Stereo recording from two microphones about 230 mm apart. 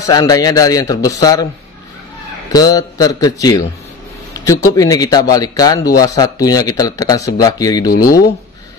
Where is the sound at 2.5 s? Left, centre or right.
Centre.